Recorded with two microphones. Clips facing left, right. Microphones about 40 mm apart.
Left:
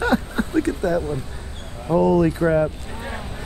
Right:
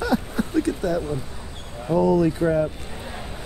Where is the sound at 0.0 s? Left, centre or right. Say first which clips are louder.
Left 3 dB; left.